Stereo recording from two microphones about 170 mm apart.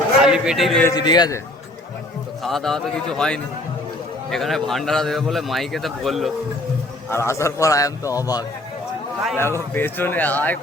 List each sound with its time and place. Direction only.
0.2 s speech: 5° right (ahead or behind)
0.9 s a man's voice: 25° left (ahead or behind)
2.4 s a man's voice: centre (ahead or behind)
7.1 s a man's voice: 15° left (ahead or behind)